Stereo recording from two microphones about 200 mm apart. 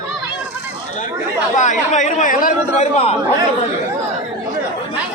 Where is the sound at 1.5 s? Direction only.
40° left (ahead or behind).